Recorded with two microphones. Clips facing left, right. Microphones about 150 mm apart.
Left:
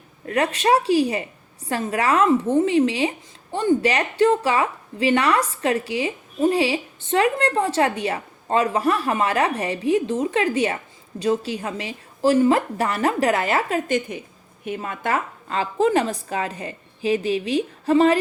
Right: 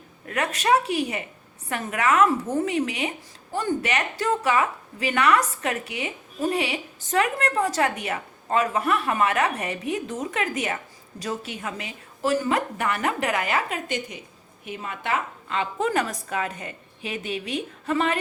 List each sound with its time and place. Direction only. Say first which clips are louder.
0.3 s a woman's voice: left 3 dB; 30° left (ahead or behind)